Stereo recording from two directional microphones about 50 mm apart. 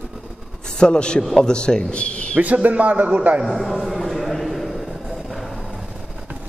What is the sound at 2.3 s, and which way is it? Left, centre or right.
Speech, right.